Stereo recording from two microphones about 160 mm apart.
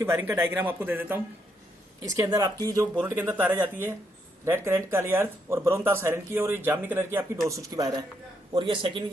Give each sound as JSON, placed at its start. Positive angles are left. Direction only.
{"t": 0.0, "sound": "speech", "side_deg": -15}
{"t": 2.0, "sound": "speech", "side_deg": -20}
{"t": 3.0, "sound": "speech", "side_deg": -10}
{"t": 8.5, "sound": "a man's voice", "side_deg": -30}